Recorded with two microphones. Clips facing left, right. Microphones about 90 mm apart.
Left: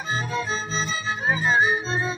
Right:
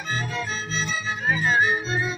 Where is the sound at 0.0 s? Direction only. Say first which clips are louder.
Left 2 dB; 35° left (ahead or behind).